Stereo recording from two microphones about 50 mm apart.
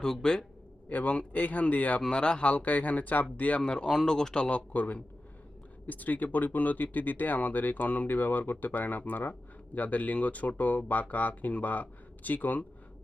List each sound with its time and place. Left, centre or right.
0.0 s speech: centre
0.9 s speech: left
2.0 s speech: centre; by 3.6 s left
3.6 s speech: centre
4.4 s speech: left